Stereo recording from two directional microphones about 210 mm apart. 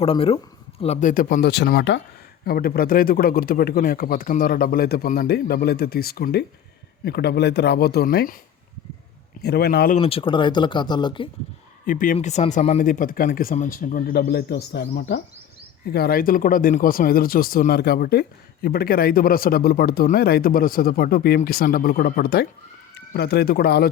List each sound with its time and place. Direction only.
0.0 s speech: 25° left (ahead or behind); by 8.4 s 45° left (ahead or behind)
9.4 s speech: 50° left (ahead or behind)
10.0 s speech: 25° left (ahead or behind)
11.9 s speech: 40° left (ahead or behind)